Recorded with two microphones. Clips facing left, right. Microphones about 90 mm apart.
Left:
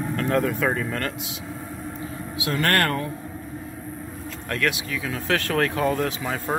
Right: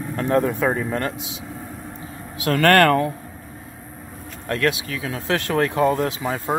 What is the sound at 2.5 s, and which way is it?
Speech, 90° right.